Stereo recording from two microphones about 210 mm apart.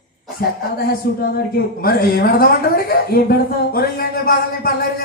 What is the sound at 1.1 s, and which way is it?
Speech, 45° left (ahead or behind).